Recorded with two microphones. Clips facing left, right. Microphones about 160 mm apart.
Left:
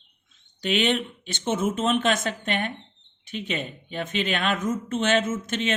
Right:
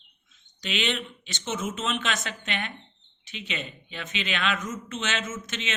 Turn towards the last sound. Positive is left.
turn(degrees=50)  # may be behind; listen again after turning